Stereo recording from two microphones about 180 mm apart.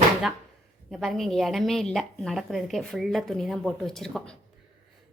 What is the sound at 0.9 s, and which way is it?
Speech, centre (ahead or behind).